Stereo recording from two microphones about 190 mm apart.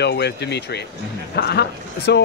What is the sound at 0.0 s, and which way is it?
Speech, 60° left (ahead or behind).